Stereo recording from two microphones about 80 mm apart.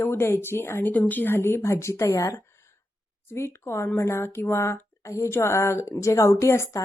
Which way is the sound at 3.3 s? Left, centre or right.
Left.